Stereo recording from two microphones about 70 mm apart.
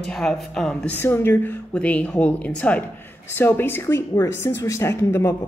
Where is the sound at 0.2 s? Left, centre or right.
Centre.